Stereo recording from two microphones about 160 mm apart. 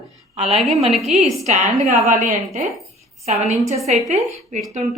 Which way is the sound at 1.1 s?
45° right (ahead or behind).